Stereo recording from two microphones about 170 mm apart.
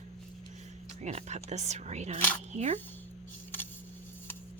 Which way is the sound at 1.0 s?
40° right (ahead or behind).